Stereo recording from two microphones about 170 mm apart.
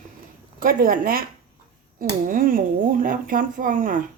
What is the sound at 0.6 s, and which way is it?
Speech, 55° right (ahead or behind).